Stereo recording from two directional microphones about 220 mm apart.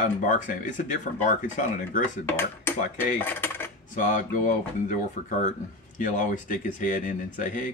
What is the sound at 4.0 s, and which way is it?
Speech, 35° left (ahead or behind).